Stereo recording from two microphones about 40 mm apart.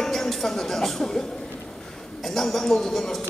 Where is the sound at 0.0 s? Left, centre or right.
Centre.